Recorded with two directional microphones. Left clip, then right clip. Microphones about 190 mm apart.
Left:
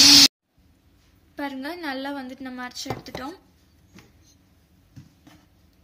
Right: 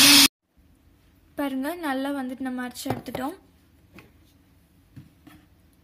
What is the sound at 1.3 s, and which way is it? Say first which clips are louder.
A woman's voice: right 3 dB; 50° right (ahead or behind).